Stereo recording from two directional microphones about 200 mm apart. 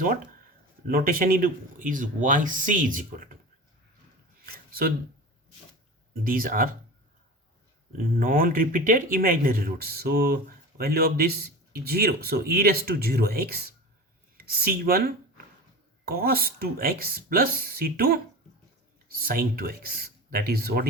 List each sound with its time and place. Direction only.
0.9 s speech: 45° right (ahead or behind)
4.5 s a sound: 50° right (ahead or behind)
6.2 s speech: 45° right (ahead or behind)
7.9 s speech: 45° right (ahead or behind)